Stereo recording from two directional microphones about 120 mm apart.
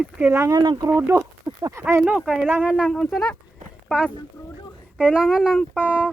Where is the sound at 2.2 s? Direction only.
Centre (ahead or behind).